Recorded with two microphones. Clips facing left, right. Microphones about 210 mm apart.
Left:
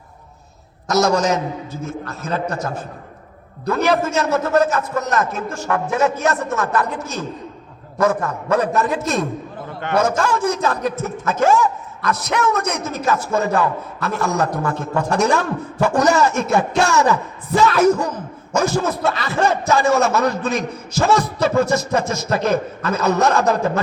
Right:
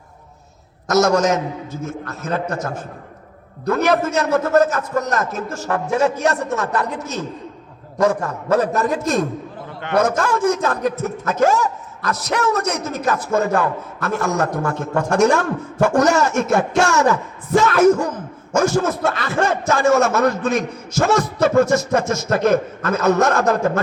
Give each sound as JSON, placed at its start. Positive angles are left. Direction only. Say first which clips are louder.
{"t": 0.9, "sound": "a man's voice", "louder": "right 1 dB", "side_deg": -55}
{"t": 9.9, "sound": "a man's voice", "louder": "even", "side_deg": -55}
{"t": 12.9, "sound": "a man's voice", "louder": "left 1 dB", "side_deg": -50}